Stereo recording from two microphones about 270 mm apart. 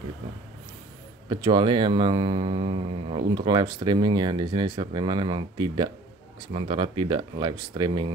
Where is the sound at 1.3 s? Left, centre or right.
Centre.